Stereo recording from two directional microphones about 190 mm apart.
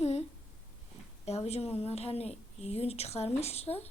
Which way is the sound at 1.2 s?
35° left (ahead or behind).